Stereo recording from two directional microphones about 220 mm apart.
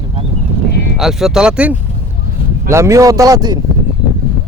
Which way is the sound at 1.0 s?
Centre (ahead or behind).